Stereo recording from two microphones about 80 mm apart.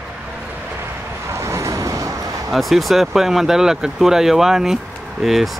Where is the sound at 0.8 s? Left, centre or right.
Right.